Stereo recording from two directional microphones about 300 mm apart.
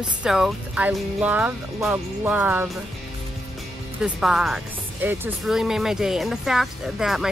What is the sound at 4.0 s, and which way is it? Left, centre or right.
Speech, centre.